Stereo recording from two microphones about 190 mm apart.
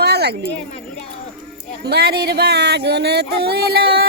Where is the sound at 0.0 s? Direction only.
60° right (ahead or behind).